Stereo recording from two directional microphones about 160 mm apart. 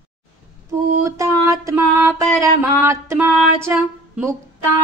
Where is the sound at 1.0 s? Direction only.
20° right (ahead or behind).